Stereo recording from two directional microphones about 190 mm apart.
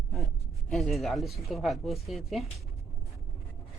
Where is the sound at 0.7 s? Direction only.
Centre (ahead or behind).